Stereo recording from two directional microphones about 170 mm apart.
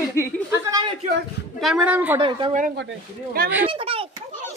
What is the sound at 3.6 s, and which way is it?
Speech, 35° right (ahead or behind).